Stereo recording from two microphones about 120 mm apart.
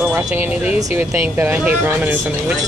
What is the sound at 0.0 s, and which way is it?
Speech, 5° right (ahead or behind).